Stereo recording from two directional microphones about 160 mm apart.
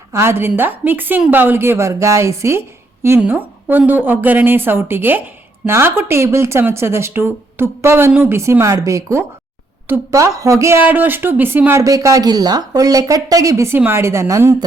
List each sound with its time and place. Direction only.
0.1 s a woman's voice: 15° right (ahead or behind)